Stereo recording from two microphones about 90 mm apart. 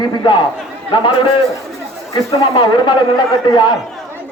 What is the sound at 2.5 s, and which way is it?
A man's voice, 60° left (ahead or behind).